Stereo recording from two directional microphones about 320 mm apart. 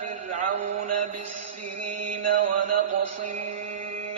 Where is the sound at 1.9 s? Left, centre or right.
Right.